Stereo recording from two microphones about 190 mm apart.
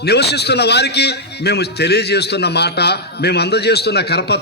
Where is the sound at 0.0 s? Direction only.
60° left (ahead or behind).